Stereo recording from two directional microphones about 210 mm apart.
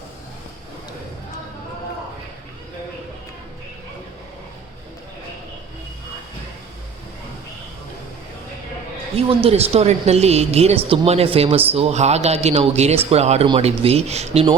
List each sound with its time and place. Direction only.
9.1 s speech: 30° right (ahead or behind)